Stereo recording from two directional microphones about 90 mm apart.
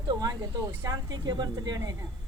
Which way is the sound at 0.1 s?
50° right (ahead or behind).